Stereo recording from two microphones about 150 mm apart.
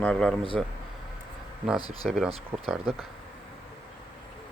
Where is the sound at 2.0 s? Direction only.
Centre (ahead or behind).